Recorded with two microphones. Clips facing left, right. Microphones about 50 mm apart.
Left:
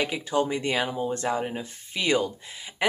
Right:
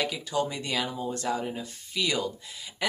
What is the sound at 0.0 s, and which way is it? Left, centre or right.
Speech, left.